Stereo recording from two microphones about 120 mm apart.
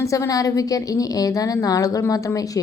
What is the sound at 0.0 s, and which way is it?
A woman's voice, 25° left (ahead or behind).